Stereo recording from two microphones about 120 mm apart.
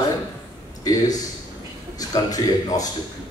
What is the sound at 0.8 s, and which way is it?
Speech, 30° left (ahead or behind).